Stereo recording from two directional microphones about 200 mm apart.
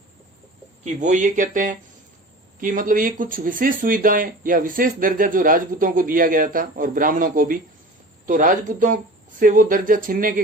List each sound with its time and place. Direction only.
0.9 s speech: 40° right (ahead or behind)